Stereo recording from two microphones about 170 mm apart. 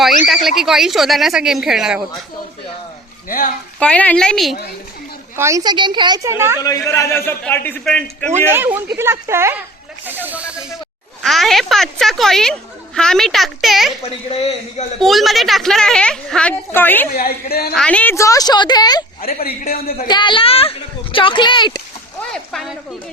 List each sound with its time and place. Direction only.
0.4 s speech: centre (ahead or behind)
3.2 s a man's voice: 55° left (ahead or behind)
3.8 s a man's voice: 5° left (ahead or behind)
5.4 s a woman's voice: 20° right (ahead or behind)
6.6 s a man's voice: 20° left (ahead or behind)
8.4 s speech: 15° right (ahead or behind)
14.0 s a man's voice: 35° left (ahead or behind)
14.9 s speech: centre (ahead or behind)
17.1 s a man's voice: 65° left (ahead or behind)
17.7 s a woman's voice: 5° left (ahead or behind); by 19.0 s 25° left (ahead or behind)
19.2 s a man's voice: 60° left (ahead or behind)
20.1 s a woman's voice: 25° left (ahead or behind)
22.3 s speech: centre (ahead or behind)